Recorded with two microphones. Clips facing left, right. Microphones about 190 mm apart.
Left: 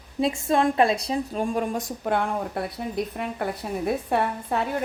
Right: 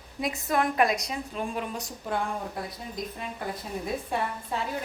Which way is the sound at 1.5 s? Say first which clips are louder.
Left 7 dB; 50° left (ahead or behind).